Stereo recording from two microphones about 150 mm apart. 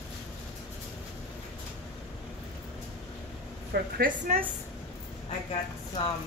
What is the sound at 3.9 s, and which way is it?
Speech, 80° right.